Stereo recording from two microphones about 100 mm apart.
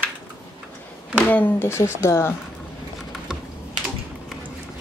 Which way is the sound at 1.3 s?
20° left (ahead or behind).